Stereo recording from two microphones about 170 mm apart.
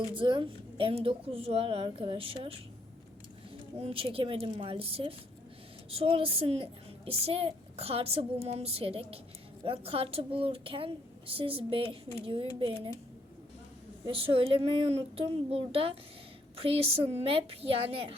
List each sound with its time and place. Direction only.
0.1 s a woman's voice: 30° right (ahead or behind)
3.8 s a woman's voice: 35° right (ahead or behind)
14.1 s a woman's voice: 30° right (ahead or behind)